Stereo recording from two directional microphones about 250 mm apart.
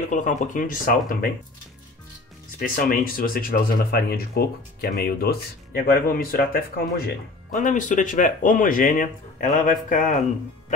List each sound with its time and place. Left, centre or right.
0.1 s speech: left
2.6 s speech: left